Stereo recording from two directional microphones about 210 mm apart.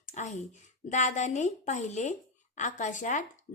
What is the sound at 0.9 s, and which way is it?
A woman's voice, 35° left (ahead or behind).